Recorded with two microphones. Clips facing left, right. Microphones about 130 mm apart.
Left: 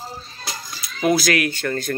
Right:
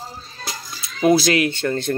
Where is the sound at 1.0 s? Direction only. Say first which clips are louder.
Right 3 dB; 25° right (ahead or behind).